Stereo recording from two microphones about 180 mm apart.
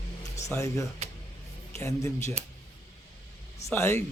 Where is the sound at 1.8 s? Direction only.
15° left (ahead or behind).